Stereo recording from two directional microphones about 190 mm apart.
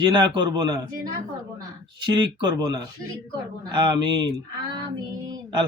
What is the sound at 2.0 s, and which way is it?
Speech, 25° right (ahead or behind).